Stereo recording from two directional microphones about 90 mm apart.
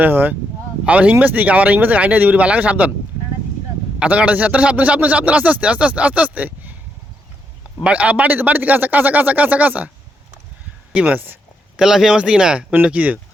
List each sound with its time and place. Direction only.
0.0 s speech: 20° right (ahead or behind)
4.0 s speech: 15° right (ahead or behind)
7.9 s speech: 15° right (ahead or behind)
10.9 s speech: 20° right (ahead or behind)
11.8 s speech: 5° right (ahead or behind)